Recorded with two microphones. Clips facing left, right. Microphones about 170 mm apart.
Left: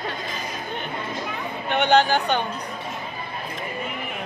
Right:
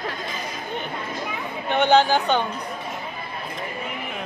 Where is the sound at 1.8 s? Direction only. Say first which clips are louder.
Right 1 dB; 15° left (ahead or behind).